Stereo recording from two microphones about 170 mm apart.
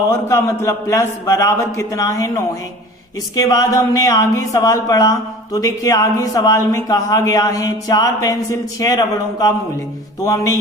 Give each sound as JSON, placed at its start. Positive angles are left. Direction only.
{"t": 0.1, "sound": "a man's voice", "side_deg": 15}